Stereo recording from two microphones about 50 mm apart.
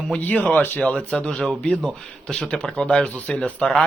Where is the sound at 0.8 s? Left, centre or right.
Left.